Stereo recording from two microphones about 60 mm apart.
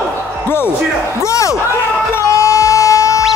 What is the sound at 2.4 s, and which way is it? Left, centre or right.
Music, left.